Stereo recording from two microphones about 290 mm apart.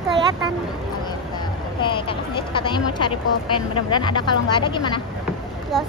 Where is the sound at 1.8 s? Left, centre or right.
Centre.